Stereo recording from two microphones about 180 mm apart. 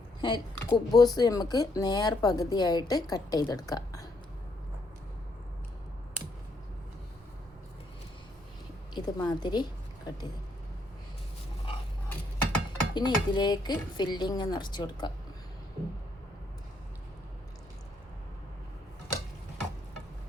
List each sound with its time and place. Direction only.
0.2 s speech: 25° left (ahead or behind)
9.0 s speech: 25° left (ahead or behind)
12.0 s a sound: 10° left (ahead or behind)
12.9 s speech: 25° left (ahead or behind)